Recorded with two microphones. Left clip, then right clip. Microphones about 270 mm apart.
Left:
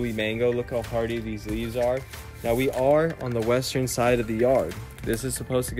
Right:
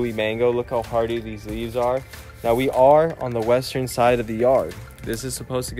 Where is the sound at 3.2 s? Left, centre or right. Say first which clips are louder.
Right 4 dB; centre.